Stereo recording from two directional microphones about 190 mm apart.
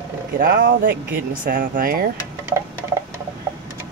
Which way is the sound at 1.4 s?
45° right (ahead or behind).